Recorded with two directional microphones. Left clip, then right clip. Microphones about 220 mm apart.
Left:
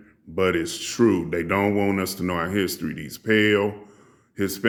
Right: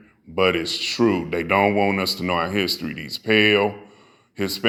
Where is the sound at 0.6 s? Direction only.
25° left (ahead or behind).